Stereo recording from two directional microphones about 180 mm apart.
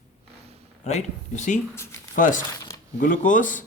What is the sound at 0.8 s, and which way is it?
A man's voice, 40° left (ahead or behind).